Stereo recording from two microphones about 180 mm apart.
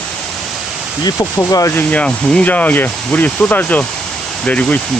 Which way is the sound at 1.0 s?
15° left (ahead or behind).